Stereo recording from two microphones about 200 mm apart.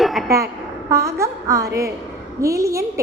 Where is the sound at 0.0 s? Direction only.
Centre (ahead or behind).